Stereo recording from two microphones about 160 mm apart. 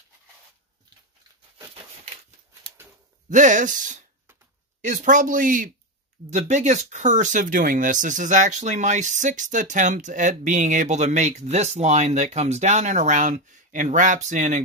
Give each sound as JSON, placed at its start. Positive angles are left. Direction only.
{"t": 3.3, "sound": "speech", "side_deg": -50}